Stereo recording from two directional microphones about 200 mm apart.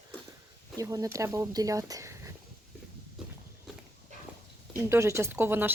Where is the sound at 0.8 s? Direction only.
15° right (ahead or behind).